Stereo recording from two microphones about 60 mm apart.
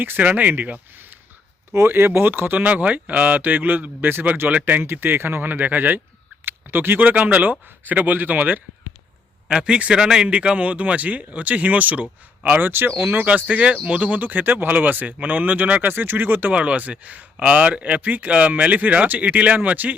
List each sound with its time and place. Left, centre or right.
0.0 s speech: right
1.7 s a man's voice: right
2.6 s a man's voice: right
9.5 s a man's voice: centre